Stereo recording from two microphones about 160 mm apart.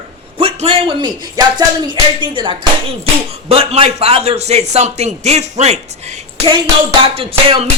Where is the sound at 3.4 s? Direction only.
40° right (ahead or behind).